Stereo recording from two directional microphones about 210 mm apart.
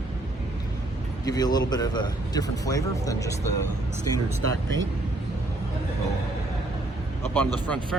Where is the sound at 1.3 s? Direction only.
20° left (ahead or behind).